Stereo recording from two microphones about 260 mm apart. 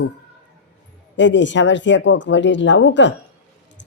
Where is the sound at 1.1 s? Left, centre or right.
Left.